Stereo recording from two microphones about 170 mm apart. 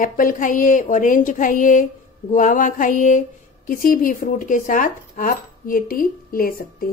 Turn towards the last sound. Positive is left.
turn(degrees=60)  # may be behind; listen again after turning